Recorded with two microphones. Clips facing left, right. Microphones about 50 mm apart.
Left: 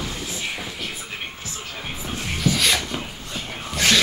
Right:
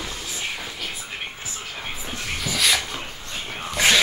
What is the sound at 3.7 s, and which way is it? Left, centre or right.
Music, centre.